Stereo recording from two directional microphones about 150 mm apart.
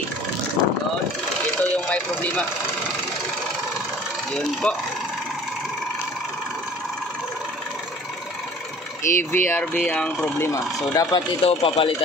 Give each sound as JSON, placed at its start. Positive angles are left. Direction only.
{"t": 1.6, "sound": "a sound", "side_deg": 10}
{"t": 4.3, "sound": "speech", "side_deg": 5}
{"t": 9.0, "sound": "speech", "side_deg": 15}
{"t": 10.5, "sound": "speech", "side_deg": 20}
{"t": 11.4, "sound": "speech", "side_deg": 40}